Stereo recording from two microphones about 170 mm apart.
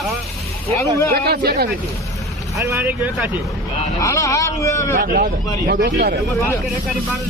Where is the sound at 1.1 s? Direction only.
70° right (ahead or behind).